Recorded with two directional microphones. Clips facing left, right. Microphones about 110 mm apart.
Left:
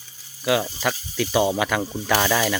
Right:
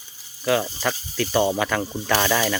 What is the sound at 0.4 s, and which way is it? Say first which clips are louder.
Speech: even; 5° left (ahead or behind).